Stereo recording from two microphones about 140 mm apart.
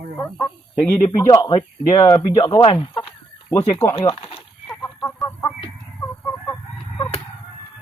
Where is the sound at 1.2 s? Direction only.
30° left (ahead or behind).